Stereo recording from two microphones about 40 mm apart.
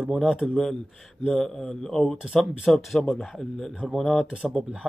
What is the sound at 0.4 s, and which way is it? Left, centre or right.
Speech, centre.